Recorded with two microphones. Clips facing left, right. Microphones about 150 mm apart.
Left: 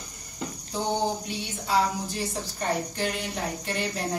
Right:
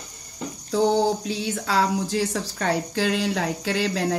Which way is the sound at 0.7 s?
90° right.